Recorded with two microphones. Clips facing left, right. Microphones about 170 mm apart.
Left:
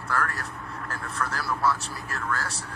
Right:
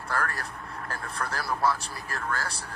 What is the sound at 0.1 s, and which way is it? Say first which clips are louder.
Speech: left 2 dB; 35° right (ahead or behind).